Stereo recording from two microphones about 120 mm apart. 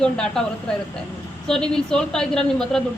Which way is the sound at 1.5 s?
5° left (ahead or behind).